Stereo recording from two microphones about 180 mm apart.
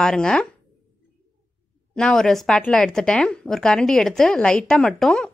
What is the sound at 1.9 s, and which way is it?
A woman's voice, 5° left (ahead or behind).